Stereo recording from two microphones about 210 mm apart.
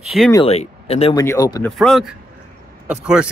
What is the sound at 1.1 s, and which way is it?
Speech, 15° left (ahead or behind).